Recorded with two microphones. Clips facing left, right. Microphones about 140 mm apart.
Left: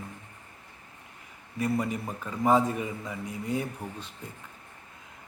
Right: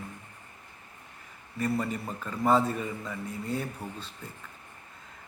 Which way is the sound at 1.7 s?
15° left (ahead or behind).